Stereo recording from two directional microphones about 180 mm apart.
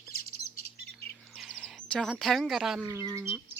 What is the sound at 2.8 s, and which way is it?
Speech, 15° right (ahead or behind).